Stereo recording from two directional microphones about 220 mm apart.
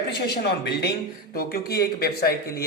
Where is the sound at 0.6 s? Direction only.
45° left (ahead or behind).